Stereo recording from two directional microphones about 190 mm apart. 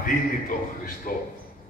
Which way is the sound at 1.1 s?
45° left (ahead or behind).